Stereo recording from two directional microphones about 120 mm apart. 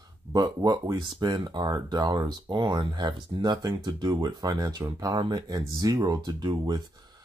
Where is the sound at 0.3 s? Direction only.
35° right (ahead or behind).